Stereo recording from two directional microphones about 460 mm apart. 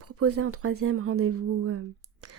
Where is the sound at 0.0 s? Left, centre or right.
Right.